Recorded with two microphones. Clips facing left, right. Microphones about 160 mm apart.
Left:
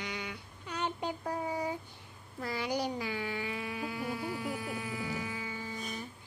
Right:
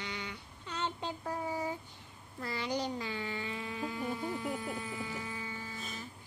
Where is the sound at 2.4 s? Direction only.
10° left (ahead or behind).